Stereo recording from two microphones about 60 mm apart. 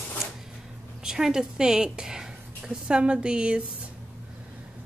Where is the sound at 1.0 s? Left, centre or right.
Centre.